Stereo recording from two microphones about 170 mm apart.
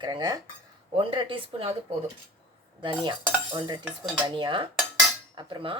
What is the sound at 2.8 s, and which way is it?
Cutlery, 30° right (ahead or behind).